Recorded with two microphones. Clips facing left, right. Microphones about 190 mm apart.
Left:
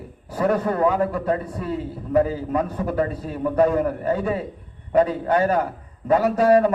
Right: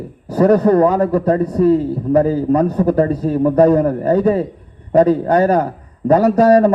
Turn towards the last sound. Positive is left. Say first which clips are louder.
# right 6 dB
turn(degrees=-40)  # may be behind; listen again after turning